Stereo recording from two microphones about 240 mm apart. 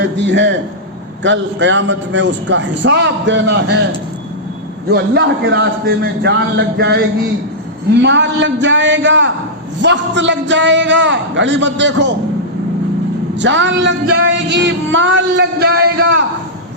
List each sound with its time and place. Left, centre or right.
0.0 s a man's voice: right
4.9 s a man's voice: right
8.0 s a man's voice: right
13.4 s a man's voice: right
16.0 s a man's voice: right